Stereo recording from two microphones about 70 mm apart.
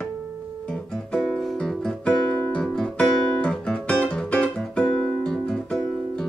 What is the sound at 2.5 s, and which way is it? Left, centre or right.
Guitar, centre.